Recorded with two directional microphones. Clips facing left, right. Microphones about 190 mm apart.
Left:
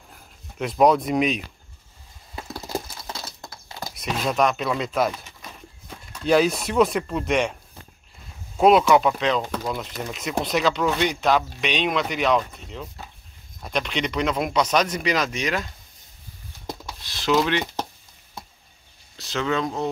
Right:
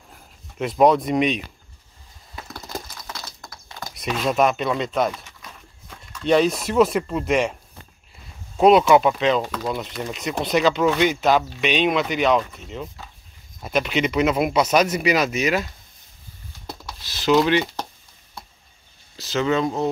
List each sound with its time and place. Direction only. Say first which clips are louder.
0.1 s speech: even; centre (ahead or behind)
2.3 s a sound: left 4 dB; 25° left (ahead or behind)
3.9 s speech: right 3 dB; centre (ahead or behind)
6.2 s speech: right 1 dB; centre (ahead or behind)
8.5 s speech: right 2 dB; centre (ahead or behind)
17.0 s speech: right 4 dB; centre (ahead or behind)
19.1 s speech: right 4 dB; centre (ahead or behind)